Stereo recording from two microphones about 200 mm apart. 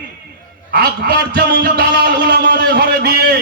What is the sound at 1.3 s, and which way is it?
A man's voice, 55° right (ahead or behind).